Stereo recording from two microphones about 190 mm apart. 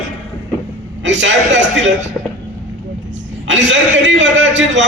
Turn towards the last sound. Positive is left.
turn(degrees=-75)  # may be behind; listen again after turning